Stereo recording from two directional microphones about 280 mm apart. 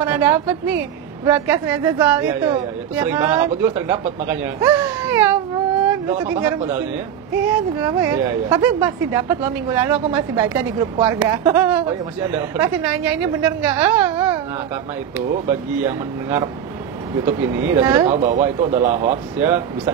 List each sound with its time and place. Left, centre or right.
0.0 s a woman's voice: centre
15.8 s a woman's voice: centre
18.0 s speech: right
19.3 s a woman's voice: centre